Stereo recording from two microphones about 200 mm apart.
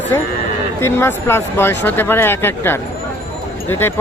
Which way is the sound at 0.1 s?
15° left (ahead or behind).